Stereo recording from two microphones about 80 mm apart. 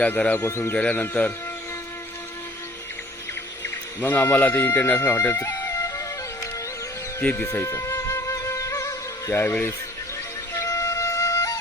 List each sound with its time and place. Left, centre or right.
0.0 s speech: centre
0.3 s speech: left
0.8 s speech: centre
3.6 s music: left
7.2 s speech: left
7.4 s music: left
9.3 s speech: left
10.5 s music: left